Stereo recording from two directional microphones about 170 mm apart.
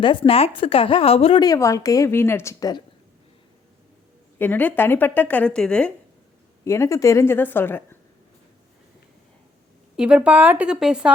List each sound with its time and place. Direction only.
0.0 s a woman's voice: 30° left (ahead or behind)
1.5 s a woman's voice: 20° left (ahead or behind)
4.4 s a woman's voice: 10° left (ahead or behind)
6.7 s a woman's voice: 15° left (ahead or behind)
10.0 s speech: 5° right (ahead or behind)